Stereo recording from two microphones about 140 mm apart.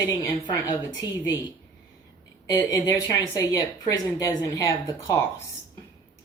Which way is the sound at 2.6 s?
25° left (ahead or behind).